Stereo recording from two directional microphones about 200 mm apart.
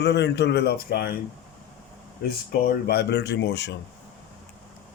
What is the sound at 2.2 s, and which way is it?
A man's voice, 50° left (ahead or behind).